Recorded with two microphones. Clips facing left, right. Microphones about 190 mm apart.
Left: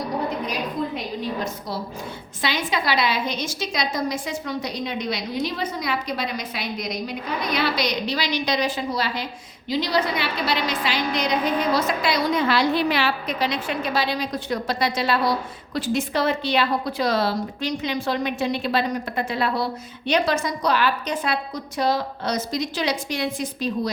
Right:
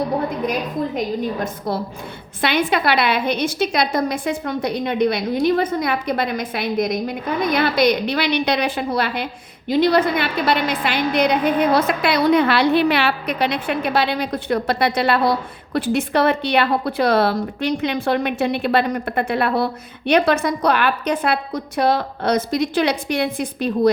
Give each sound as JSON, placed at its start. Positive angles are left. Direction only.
{"t": 0.9, "sound": "a woman's voice", "side_deg": -50}